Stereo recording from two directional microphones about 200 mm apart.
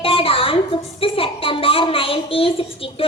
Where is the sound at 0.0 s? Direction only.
25° left (ahead or behind).